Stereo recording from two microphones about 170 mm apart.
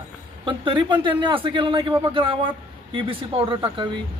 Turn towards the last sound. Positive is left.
turn(degrees=-30)  # may be behind; listen again after turning